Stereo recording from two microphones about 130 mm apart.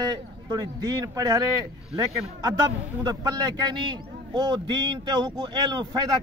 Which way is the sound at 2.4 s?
30° right (ahead or behind).